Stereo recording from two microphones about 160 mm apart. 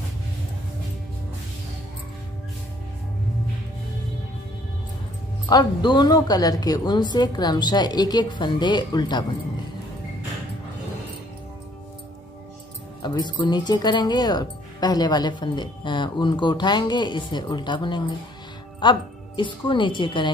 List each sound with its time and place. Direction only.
5.5 s speech: 30° left (ahead or behind)
13.0 s speech: 25° left (ahead or behind)